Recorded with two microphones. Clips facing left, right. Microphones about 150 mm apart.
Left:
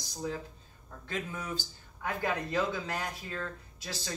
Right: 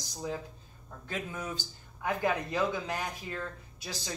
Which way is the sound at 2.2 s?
15° right (ahead or behind).